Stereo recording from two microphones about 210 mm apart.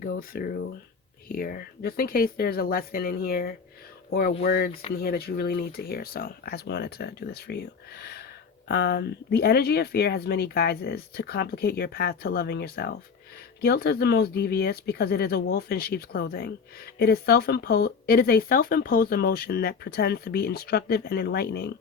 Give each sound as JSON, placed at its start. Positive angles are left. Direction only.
{"t": 0.0, "sound": "speech", "side_deg": 45}